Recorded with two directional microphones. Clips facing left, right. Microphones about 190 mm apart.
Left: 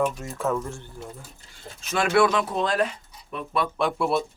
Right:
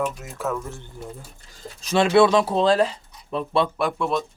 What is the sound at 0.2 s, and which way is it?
Speech, 5° right (ahead or behind).